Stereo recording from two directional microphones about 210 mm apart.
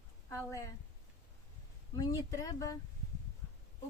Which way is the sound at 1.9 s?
15° left (ahead or behind).